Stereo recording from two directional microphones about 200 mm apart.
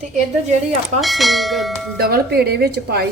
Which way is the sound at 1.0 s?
Centre (ahead or behind).